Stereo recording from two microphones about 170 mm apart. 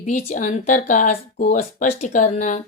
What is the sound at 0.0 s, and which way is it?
Speech, 45° left (ahead or behind).